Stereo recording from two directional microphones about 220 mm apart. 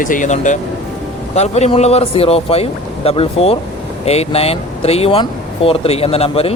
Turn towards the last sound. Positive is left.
turn(degrees=25)  # may be behind; listen again after turning